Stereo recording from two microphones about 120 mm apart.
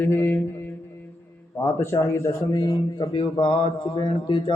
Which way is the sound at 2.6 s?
35° left (ahead or behind).